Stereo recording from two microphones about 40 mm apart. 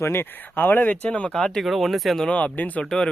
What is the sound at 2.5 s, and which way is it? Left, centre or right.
Speech, left.